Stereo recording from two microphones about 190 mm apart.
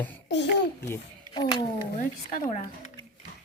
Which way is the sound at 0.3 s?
65° left (ahead or behind).